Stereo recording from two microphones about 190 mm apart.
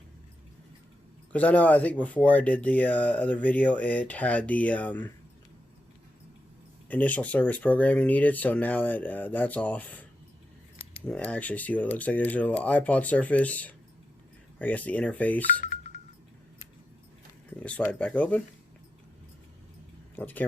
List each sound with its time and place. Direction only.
1.3 s speech: 5° left (ahead or behind)
6.8 s speech: 10° left (ahead or behind)
15.6 s music: 35° left (ahead or behind)
17.6 s speech: 5° left (ahead or behind)
20.1 s speech: 10° left (ahead or behind)